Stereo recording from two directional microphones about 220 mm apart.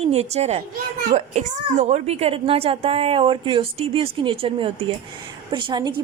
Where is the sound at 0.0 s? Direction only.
30° right (ahead or behind).